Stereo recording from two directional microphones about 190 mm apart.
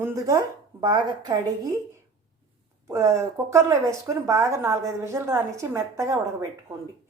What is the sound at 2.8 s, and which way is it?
Speech, 15° right (ahead or behind).